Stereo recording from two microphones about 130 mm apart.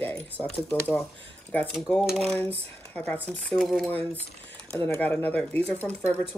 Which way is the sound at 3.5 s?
Centre (ahead or behind).